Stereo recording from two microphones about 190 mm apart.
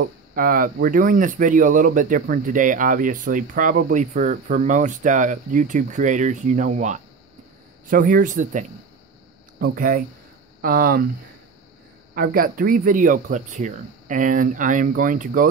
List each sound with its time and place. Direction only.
0.3 s speech: 50° right (ahead or behind)
12.2 s speech: 50° right (ahead or behind)